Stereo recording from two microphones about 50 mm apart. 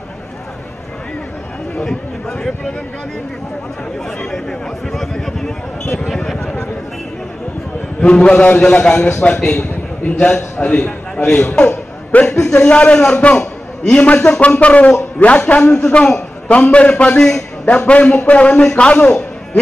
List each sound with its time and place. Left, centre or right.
1.9 s speech: centre
4.2 s speech: centre
8.0 s a man's voice: centre
9.3 s a man's voice: centre
12.4 s a man's voice: centre